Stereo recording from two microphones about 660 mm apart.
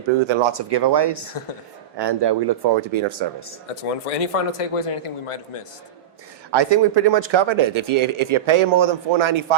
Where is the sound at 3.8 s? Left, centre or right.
Left.